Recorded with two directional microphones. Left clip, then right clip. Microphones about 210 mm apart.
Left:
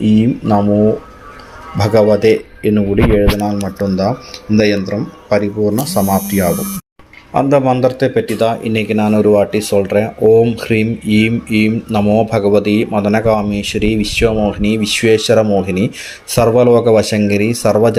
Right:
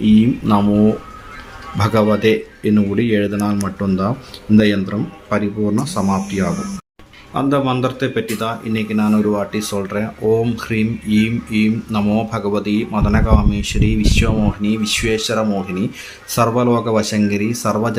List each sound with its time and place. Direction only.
0.0 s mantra: 5° left (ahead or behind)
1.8 s speech: 5° left (ahead or behind)
4.9 s speech: 15° left (ahead or behind)